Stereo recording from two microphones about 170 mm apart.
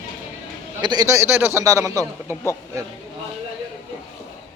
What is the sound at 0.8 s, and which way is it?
A man's voice, 25° right (ahead or behind).